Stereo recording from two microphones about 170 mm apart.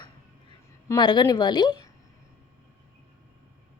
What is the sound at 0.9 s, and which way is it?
A woman's voice, 25° left (ahead or behind).